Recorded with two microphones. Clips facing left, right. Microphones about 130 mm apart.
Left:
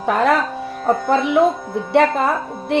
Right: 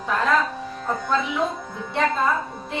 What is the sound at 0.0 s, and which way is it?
A woman's voice, 70° left (ahead or behind).